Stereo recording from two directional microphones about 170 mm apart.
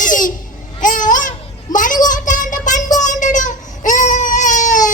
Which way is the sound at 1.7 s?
50° left (ahead or behind).